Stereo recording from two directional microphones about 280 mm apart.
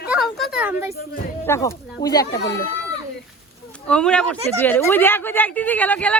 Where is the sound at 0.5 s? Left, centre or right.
Centre.